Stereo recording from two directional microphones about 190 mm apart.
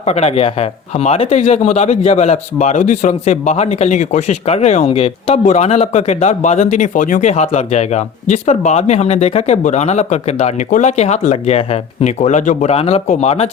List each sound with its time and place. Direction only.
0.0 s a man's voice: 35° left (ahead or behind)